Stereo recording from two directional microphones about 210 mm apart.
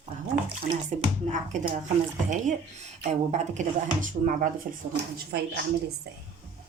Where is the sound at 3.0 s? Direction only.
35° right (ahead or behind).